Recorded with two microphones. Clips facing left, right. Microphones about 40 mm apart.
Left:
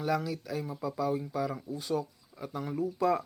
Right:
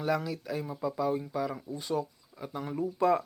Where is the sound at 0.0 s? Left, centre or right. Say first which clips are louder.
Right 1 dB; centre.